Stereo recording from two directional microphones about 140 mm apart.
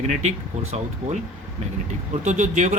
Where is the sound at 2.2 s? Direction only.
60° right (ahead or behind).